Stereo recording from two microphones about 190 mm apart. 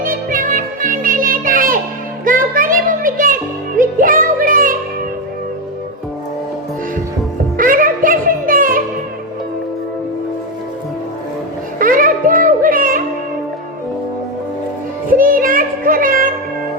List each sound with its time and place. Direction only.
0.0 s music: 45° right (ahead or behind)
2.2 s a sound: 45° right (ahead or behind)
3.8 s music: 45° right (ahead or behind)
7.5 s music: 45° right (ahead or behind)
11.8 s music: 45° right (ahead or behind)
15.2 s music: 45° right (ahead or behind)